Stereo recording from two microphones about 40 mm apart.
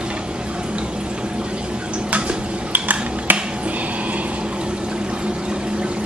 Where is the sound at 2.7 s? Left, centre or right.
Right.